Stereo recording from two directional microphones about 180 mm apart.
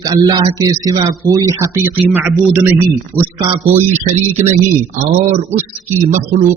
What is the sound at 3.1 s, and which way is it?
Speech, 10° left (ahead or behind).